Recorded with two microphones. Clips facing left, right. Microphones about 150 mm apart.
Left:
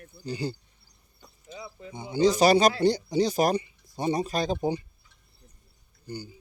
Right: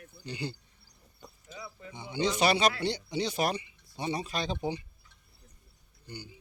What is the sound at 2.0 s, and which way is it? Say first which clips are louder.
Speech: left 7 dB; 40° left (ahead or behind).